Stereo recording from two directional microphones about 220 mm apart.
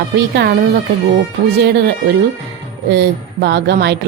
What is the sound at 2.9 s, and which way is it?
Speech, 50° right (ahead or behind).